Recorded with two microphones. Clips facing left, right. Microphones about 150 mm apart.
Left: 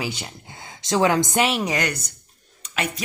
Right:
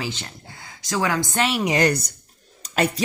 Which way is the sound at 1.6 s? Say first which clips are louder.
Right 5 dB; 30° right (ahead or behind).